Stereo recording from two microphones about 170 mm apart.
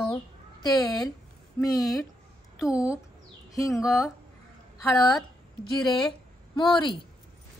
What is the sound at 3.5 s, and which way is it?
Speech, 20° left (ahead or behind).